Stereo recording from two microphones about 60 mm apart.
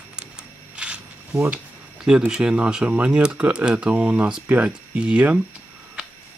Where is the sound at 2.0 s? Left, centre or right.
Centre.